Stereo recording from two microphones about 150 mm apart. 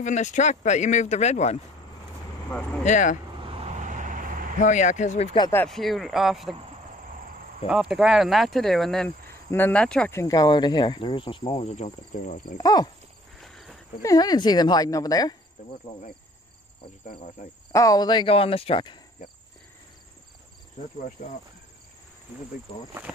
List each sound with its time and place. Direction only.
0.0 s speech: 55° left (ahead or behind)
2.8 s speech: 55° left (ahead or behind)
3.3 s vehicle: 40° right (ahead or behind); by 4.6 s 60° right (ahead or behind)
4.6 s speech: 55° left (ahead or behind)
5.7 s speech: centre (ahead or behind)
7.6 s speech: 5° right (ahead or behind)
10.1 s speech: 25° left (ahead or behind); by 12.5 s 55° left (ahead or behind)
12.5 s speech: 25° left (ahead or behind)
13.4 s cricket: centre (ahead or behind)
14.0 s speech: 25° left (ahead or behind)
17.7 s speech: 25° left (ahead or behind)
21.2 s speech: 60° left (ahead or behind)
22.7 s speech: 35° left (ahead or behind)
23.1 s speech: 5° right (ahead or behind)